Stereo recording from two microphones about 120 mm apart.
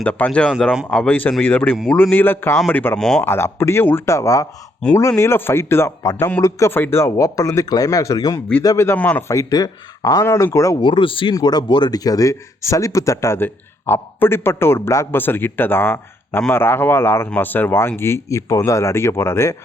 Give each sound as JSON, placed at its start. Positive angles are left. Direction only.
{"t": 0.0, "sound": "a man's voice", "side_deg": 10}
{"t": 3.0, "sound": "speech", "side_deg": 5}
{"t": 3.2, "sound": "speech", "side_deg": 20}
{"t": 9.0, "sound": "a man's voice", "side_deg": 10}
{"t": 9.2, "sound": "speech", "side_deg": 25}
{"t": 10.8, "sound": "speech", "side_deg": 45}
{"t": 11.3, "sound": "speech", "side_deg": 35}